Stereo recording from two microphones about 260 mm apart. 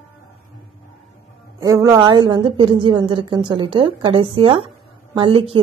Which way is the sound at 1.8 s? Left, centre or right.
Centre.